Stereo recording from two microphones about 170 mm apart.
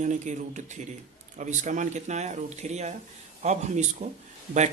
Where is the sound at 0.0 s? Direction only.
45° right (ahead or behind).